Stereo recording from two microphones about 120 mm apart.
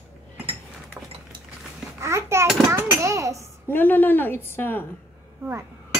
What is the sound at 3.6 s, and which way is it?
A woman's voice, 15° left (ahead or behind).